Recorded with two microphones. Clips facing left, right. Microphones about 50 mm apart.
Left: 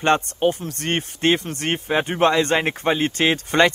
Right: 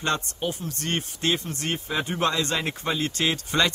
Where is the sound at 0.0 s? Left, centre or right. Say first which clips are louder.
Left 9 dB; left.